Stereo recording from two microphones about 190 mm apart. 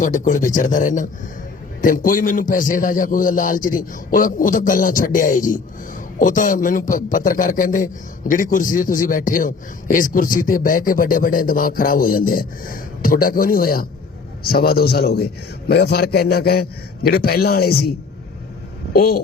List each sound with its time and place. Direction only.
0.0 s a man's voice: 40° left (ahead or behind)
18.9 s a man's voice: 55° left (ahead or behind)